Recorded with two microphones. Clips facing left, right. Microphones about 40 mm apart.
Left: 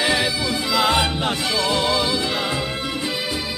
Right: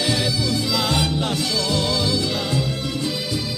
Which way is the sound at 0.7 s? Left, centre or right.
Left.